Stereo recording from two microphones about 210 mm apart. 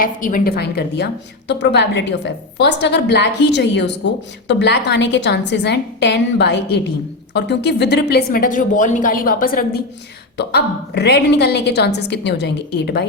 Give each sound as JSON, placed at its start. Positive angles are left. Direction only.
{"t": 0.0, "sound": "a woman's voice", "side_deg": 40}